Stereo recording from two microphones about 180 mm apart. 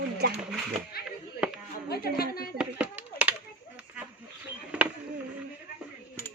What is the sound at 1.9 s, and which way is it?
Speech, 60° left (ahead or behind).